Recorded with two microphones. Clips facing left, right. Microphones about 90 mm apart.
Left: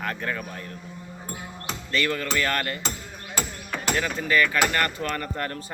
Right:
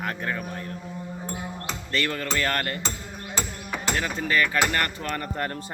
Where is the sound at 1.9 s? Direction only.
35° right (ahead or behind).